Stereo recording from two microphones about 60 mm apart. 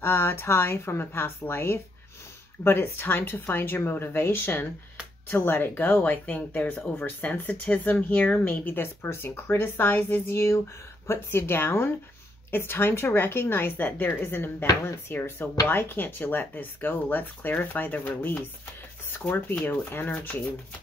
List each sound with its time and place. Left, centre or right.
0.0 s speech: left